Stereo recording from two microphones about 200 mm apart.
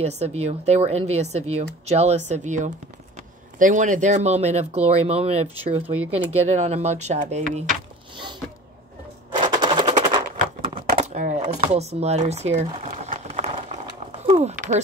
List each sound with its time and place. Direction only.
0.0 s speech: 30° right (ahead or behind)
9.4 s machine gun: 20° right (ahead or behind)
10.3 s a sound: 35° right (ahead or behind)